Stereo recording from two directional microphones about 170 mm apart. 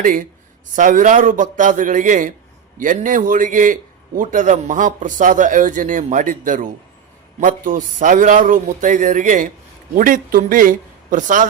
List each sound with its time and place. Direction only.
0.0 s a man's voice: 50° right (ahead or behind)